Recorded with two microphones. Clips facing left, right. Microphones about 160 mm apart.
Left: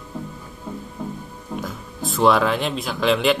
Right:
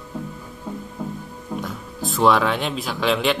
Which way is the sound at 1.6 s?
Centre (ahead or behind).